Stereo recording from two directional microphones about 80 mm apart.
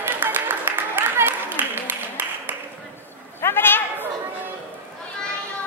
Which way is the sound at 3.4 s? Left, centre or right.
Left.